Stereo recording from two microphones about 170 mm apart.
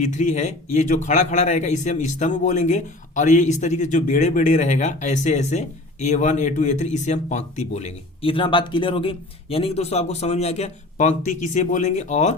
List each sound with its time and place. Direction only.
0.0 s a man's voice: 45° left (ahead or behind)